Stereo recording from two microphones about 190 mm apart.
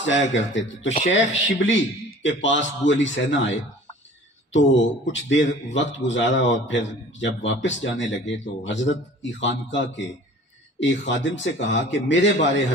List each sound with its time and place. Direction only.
0.0 s a man's voice: 70° left (ahead or behind)